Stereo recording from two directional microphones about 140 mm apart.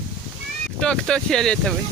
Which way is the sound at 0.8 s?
5° left (ahead or behind).